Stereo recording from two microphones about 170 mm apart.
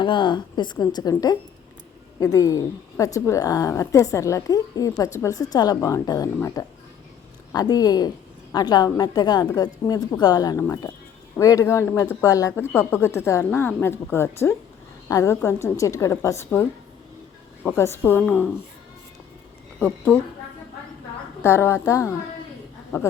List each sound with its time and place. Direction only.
0.0 s a woman's voice: 30° left (ahead or behind); by 18.5 s 10° left (ahead or behind)
21.4 s a woman's voice: 15° left (ahead or behind)